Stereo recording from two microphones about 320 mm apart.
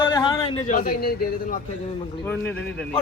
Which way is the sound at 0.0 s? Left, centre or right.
Centre.